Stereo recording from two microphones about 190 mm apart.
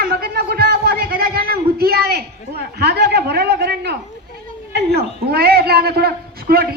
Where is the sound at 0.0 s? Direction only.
55° right (ahead or behind).